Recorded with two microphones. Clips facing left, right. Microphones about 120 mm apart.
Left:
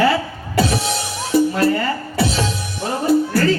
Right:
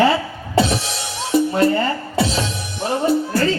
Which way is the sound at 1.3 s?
25° right (ahead or behind).